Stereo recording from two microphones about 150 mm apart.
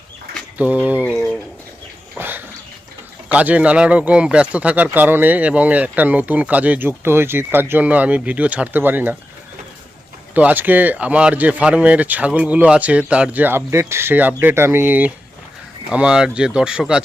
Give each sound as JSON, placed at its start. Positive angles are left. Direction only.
{"t": 0.6, "sound": "speech", "side_deg": -10}
{"t": 1.1, "sound": "bird", "side_deg": 5}
{"t": 2.1, "sound": "a sound", "side_deg": -15}
{"t": 3.3, "sound": "speech", "side_deg": -10}
{"t": 10.3, "sound": "speech", "side_deg": -10}